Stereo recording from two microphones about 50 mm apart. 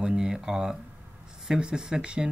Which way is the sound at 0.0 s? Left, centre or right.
Centre.